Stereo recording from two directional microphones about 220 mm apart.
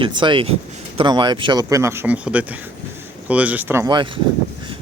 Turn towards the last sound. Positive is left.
turn(degrees=-20)  # may be behind; listen again after turning